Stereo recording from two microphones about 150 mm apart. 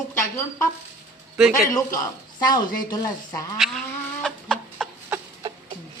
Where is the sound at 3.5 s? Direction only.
Centre (ahead or behind).